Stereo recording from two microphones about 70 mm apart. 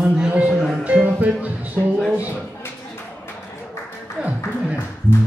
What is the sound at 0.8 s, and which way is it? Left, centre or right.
A man's voice, centre.